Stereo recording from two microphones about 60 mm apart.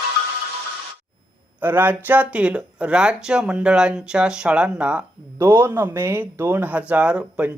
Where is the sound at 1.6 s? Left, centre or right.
Right.